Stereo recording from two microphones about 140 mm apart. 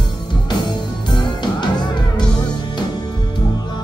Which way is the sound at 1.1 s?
30° left (ahead or behind).